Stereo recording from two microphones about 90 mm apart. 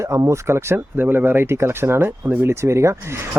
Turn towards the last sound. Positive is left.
turn(degrees=-30)  # may be behind; listen again after turning